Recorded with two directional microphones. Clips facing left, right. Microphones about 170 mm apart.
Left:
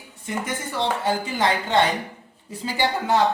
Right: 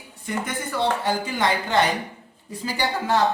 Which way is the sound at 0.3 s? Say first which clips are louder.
Right 1 dB; 25° left (ahead or behind).